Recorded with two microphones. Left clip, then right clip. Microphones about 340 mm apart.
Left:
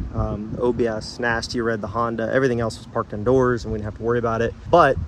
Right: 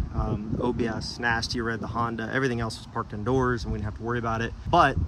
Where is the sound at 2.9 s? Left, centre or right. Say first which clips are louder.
Left 7 dB; left.